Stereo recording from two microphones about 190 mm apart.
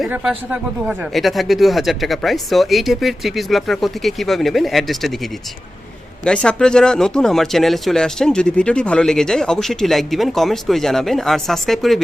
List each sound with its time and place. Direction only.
0.0 s speech: 5° right (ahead or behind)